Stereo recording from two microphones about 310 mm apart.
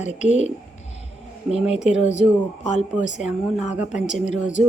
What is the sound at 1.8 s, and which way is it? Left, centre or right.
Speech, left.